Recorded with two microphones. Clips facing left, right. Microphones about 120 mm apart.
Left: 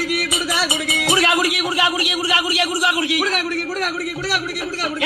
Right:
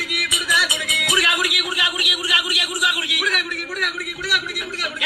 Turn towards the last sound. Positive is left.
turn(degrees=30)  # may be behind; listen again after turning